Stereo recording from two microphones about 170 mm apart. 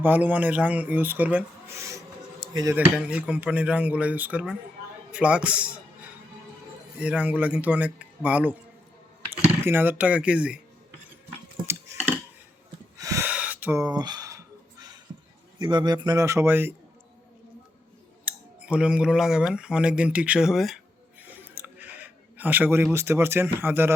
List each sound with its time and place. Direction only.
0.0 s speech: 10° right (ahead or behind)
1.9 s a sound: 20° right (ahead or behind)
2.7 s speech: 10° right (ahead or behind)
7.0 s speech: 10° right (ahead or behind)
9.6 s speech: 10° right (ahead or behind)
13.0 s gasp: 20° right (ahead or behind)
13.3 s a sound: 10° right (ahead or behind)
15.5 s a man's voice: 25° right (ahead or behind)
18.3 s speech: 5° right (ahead or behind)
22.4 s speech: 10° right (ahead or behind)